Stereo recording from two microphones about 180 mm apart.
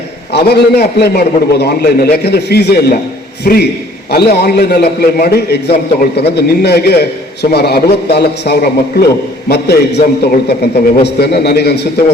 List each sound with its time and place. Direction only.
0.3 s a man's voice: 65° left (ahead or behind)